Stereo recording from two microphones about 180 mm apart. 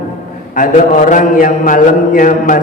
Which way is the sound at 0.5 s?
50° left (ahead or behind).